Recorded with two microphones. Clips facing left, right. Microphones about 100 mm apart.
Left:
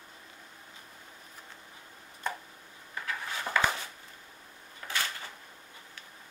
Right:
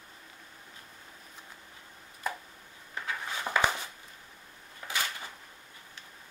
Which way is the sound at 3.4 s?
20° right (ahead or behind).